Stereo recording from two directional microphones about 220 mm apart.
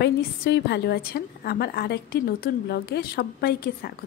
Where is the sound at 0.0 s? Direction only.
45° left (ahead or behind).